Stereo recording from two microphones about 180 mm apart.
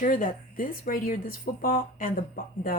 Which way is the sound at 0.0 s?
45° left (ahead or behind).